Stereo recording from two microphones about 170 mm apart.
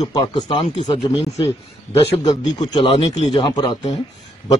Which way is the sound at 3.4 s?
25° left (ahead or behind).